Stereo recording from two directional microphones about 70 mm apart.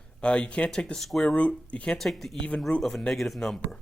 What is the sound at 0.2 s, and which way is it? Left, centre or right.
Speech, centre.